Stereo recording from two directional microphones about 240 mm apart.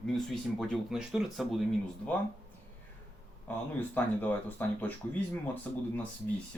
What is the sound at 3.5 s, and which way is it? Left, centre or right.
Speech, centre.